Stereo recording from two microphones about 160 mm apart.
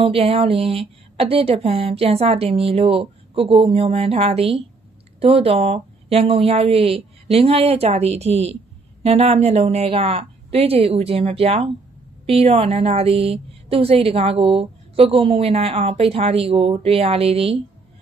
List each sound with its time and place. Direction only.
0.0 s a woman's voice: 35° right (ahead or behind)